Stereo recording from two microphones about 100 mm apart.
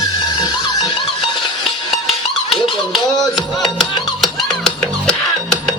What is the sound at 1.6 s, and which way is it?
Music, centre (ahead or behind).